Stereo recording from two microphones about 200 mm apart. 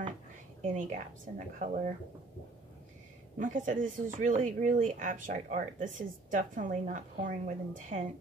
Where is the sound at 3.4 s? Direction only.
40° right (ahead or behind).